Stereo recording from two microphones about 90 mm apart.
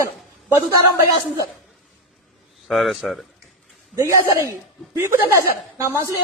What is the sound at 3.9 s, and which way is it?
A man's voice, 35° right (ahead or behind).